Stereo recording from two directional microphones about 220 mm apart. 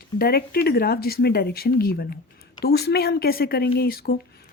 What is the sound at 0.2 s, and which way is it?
Speech, 45° left (ahead or behind).